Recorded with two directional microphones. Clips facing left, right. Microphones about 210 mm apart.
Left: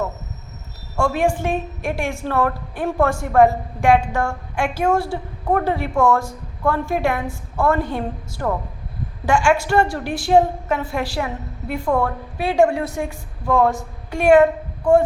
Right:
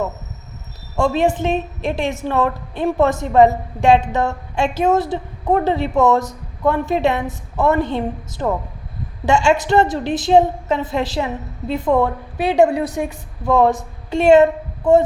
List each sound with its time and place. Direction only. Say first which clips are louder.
0.9 s a woman's voice: right 2 dB; 20° right (ahead or behind)